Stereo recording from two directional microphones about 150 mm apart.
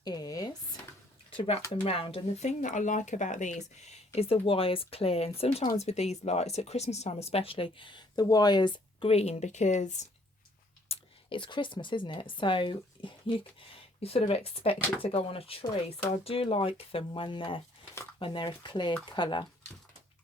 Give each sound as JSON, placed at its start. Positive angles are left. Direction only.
{"t": 0.0, "sound": "speech", "side_deg": 25}
{"t": 1.4, "sound": "speech", "side_deg": 40}
{"t": 10.8, "sound": "speech", "side_deg": 35}